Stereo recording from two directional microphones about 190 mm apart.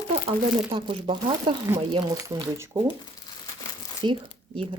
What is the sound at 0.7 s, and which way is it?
Speech, 30° right (ahead or behind).